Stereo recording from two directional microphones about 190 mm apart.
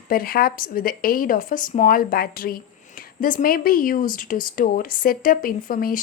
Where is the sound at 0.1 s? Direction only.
50° left (ahead or behind).